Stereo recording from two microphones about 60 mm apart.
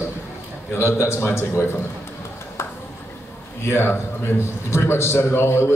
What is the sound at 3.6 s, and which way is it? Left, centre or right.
A man's voice, left.